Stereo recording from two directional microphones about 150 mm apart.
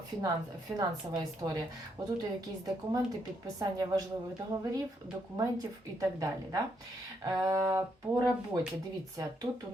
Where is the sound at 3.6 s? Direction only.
25° right (ahead or behind).